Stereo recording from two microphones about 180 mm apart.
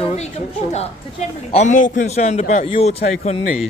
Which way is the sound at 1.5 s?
40° left (ahead or behind).